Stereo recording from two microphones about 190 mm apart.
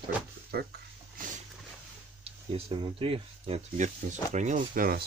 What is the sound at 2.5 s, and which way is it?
Speech, 30° right (ahead or behind).